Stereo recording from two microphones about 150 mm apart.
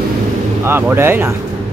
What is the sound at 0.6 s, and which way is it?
Speech, 15° right (ahead or behind).